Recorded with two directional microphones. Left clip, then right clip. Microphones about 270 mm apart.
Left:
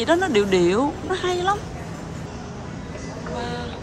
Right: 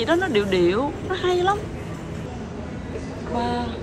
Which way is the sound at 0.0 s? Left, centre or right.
Centre.